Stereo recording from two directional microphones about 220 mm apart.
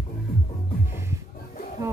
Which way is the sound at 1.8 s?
15° right (ahead or behind).